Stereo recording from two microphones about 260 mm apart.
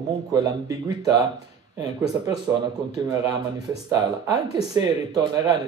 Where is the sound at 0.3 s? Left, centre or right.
Centre.